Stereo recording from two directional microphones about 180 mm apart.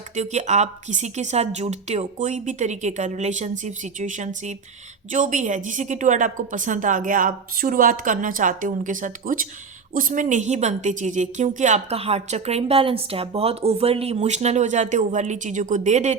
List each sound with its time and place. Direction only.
0.2 s a woman's voice: 40° right (ahead or behind)